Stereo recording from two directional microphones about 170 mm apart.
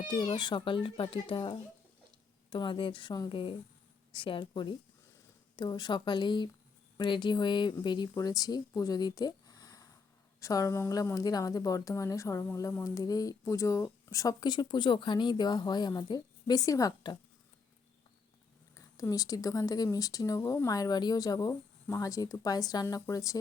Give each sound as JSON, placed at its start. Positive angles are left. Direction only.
{"t": 0.1, "sound": "a woman's voice", "side_deg": 25}
{"t": 18.8, "sound": "a woman's voice", "side_deg": 20}